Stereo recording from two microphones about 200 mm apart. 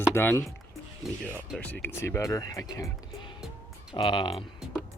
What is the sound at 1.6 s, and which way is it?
Speech, 10° left (ahead or behind).